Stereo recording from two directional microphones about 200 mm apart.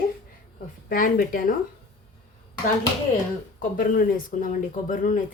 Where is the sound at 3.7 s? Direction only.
45° left (ahead or behind).